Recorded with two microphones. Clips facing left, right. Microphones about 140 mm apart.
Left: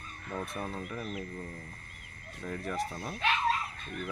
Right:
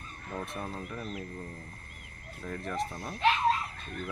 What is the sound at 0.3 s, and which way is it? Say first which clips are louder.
Speech: left 1 dB; centre (ahead or behind).